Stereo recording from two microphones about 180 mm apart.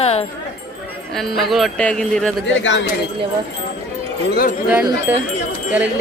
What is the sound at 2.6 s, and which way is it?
Speech, 90° left.